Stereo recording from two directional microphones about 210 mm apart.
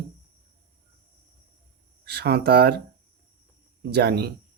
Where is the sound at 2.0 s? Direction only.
50° right (ahead or behind).